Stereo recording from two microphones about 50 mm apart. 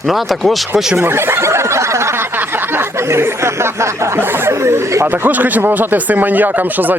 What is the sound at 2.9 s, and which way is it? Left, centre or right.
Speech, right.